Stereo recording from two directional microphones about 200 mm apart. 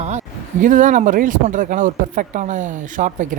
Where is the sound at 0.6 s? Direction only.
40° right (ahead or behind).